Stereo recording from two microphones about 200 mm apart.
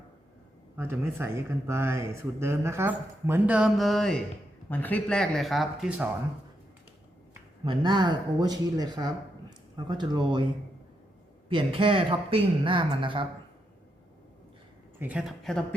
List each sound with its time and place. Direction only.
0.8 s speech: 10° right (ahead or behind)
7.6 s speech: 25° right (ahead or behind)
11.4 s speech: 25° right (ahead or behind)
14.9 s speech: 10° right (ahead or behind)